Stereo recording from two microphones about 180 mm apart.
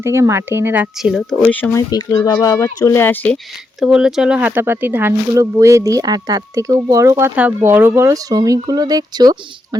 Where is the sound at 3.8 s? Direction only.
5° right (ahead or behind).